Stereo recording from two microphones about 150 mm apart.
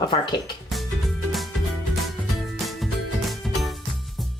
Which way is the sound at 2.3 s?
Centre (ahead or behind).